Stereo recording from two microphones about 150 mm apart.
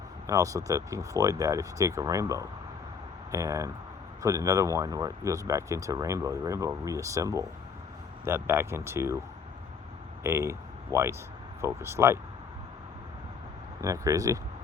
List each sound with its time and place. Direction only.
0.3 s speech: 20° right (ahead or behind)
10.2 s speech: 20° right (ahead or behind)
13.8 s speech: 20° right (ahead or behind)